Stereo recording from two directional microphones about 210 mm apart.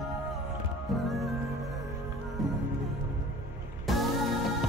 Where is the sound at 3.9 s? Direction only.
Centre (ahead or behind).